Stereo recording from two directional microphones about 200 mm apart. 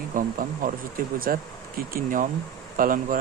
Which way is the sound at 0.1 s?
45° right (ahead or behind).